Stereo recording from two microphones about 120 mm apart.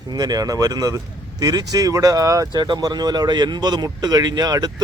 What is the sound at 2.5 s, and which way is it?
Speech, 40° right (ahead or behind).